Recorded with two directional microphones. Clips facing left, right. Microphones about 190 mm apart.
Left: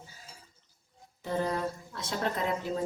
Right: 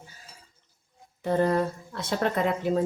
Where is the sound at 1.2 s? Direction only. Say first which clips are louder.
Right 7 dB; 60° right (ahead or behind).